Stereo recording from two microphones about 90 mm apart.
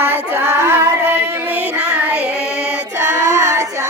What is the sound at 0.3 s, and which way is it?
Child singing, 25° right (ahead or behind).